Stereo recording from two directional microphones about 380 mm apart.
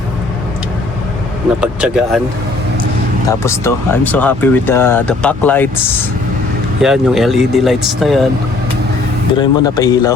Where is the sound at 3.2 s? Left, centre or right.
Centre.